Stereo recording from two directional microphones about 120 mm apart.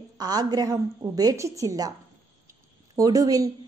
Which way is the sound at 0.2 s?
35° right (ahead or behind).